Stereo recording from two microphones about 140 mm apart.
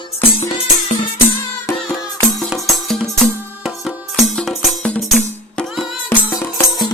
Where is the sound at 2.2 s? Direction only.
Centre (ahead or behind).